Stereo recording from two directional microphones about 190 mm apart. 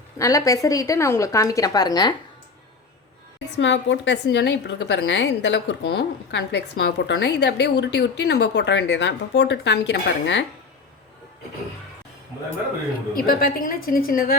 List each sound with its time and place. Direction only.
0.2 s speech: 15° left (ahead or behind)
3.6 s a woman's voice: 75° left (ahead or behind)
13.1 s a woman's voice: 50° left (ahead or behind)